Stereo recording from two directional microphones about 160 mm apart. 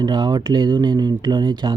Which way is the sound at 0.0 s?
25° right (ahead or behind).